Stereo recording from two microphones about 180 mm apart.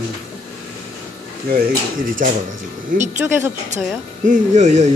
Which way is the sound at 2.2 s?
50° right (ahead or behind).